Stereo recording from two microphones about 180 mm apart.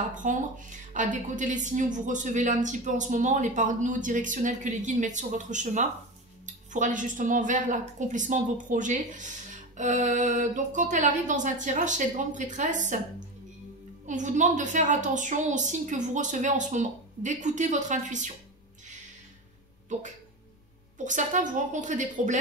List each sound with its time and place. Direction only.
0.1 s speech: 45° right (ahead or behind)
14.0 s speech: 45° right (ahead or behind)
21.0 s speech: 45° right (ahead or behind)